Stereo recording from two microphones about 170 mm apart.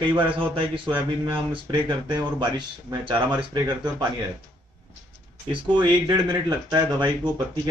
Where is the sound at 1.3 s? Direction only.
30° right (ahead or behind).